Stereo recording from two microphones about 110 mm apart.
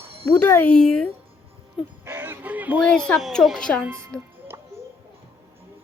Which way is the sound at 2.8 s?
5° left (ahead or behind).